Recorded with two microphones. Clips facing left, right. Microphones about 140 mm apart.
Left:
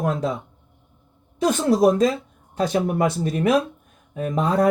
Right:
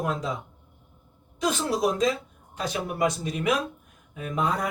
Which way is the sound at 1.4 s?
50° left (ahead or behind).